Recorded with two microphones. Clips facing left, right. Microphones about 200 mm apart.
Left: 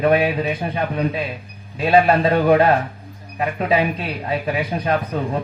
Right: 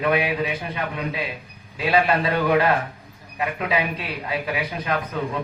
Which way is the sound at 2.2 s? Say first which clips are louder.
Left 5 dB; 35° left (ahead or behind).